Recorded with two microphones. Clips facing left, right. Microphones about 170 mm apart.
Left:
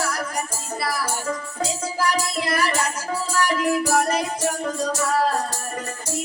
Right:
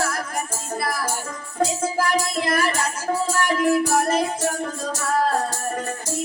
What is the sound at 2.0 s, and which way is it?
Music, 50° right (ahead or behind).